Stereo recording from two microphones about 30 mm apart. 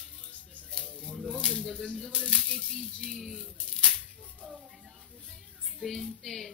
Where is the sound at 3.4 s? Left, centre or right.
Left.